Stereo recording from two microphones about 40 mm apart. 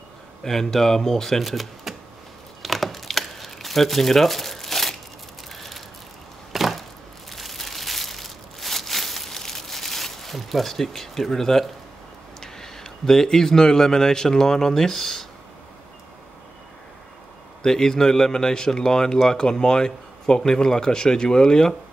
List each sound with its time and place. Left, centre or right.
0.4 s speech: centre
2.6 s crumpling: centre
5.5 s a sound: centre
12.4 s a man's voice: centre
17.6 s speech: centre